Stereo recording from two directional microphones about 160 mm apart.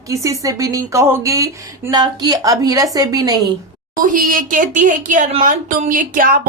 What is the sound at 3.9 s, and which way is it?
A woman's voice, 60° right (ahead or behind).